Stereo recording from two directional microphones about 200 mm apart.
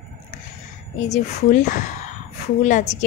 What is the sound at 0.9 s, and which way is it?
A woman's voice, 35° left (ahead or behind).